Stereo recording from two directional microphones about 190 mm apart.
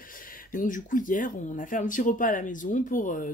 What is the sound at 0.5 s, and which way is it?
Speech, 45° left (ahead or behind).